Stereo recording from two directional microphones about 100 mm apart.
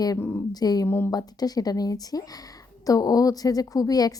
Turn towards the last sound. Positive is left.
turn(degrees=40)  # may be behind; listen again after turning